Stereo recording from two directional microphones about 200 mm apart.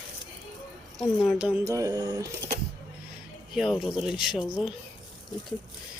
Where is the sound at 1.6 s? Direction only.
15° right (ahead or behind).